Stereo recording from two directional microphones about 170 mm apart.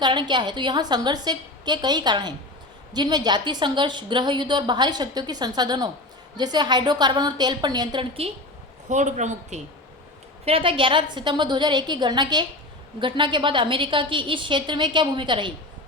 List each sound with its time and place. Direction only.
0.0 s a woman's voice: 25° right (ahead or behind)
8.9 s a man's voice: 45° right (ahead or behind)
10.4 s a woman's voice: 35° right (ahead or behind)